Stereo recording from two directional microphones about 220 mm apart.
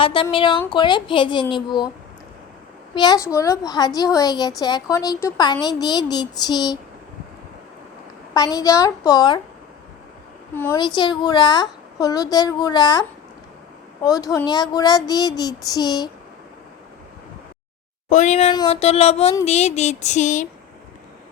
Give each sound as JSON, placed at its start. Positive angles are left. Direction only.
{"t": 0.0, "sound": "a woman's voice", "side_deg": 25}
{"t": 2.9, "sound": "a woman's voice", "side_deg": 20}
{"t": 8.3, "sound": "speech", "side_deg": 15}
{"t": 10.8, "sound": "a woman's voice", "side_deg": 20}
{"t": 14.0, "sound": "speech", "side_deg": 15}
{"t": 18.1, "sound": "a woman's voice", "side_deg": 35}